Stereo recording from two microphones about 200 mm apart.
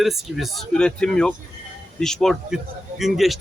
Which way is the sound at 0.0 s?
Centre (ahead or behind).